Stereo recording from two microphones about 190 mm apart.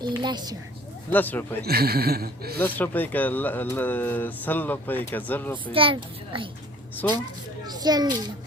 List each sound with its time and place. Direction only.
0.2 s a child's voice: 20° right (ahead or behind)
1.1 s speech: 10° left (ahead or behind)
1.6 s speech: 55° right (ahead or behind)
2.6 s speech: 10° left (ahead or behind)
5.7 s a child's voice: 25° right (ahead or behind)
7.0 s speech: 10° left (ahead or behind)
7.7 s a child's voice: 20° right (ahead or behind)